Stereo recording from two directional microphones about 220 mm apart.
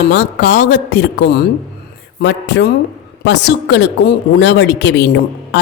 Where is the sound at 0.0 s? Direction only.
50° left (ahead or behind).